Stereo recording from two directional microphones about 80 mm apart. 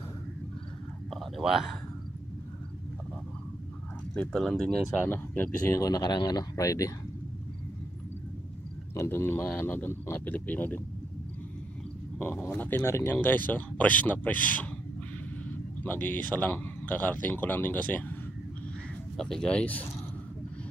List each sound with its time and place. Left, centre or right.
1.1 s speech: centre
4.1 s speech: centre
5.0 s speech: left
5.8 s speech: left
6.5 s speech: left
8.9 s speech: left
12.2 s speech: left
15.8 s speech: left
19.1 s speech: centre